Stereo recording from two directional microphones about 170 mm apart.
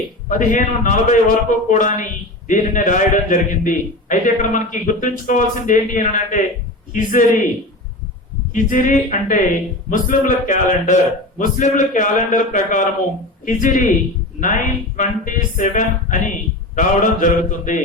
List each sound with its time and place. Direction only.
0.3 s a woman's voice: 50° left (ahead or behind)
8.5 s a woman's voice: 50° left (ahead or behind)